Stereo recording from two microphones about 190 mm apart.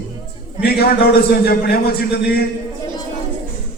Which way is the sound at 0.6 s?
55° left (ahead or behind).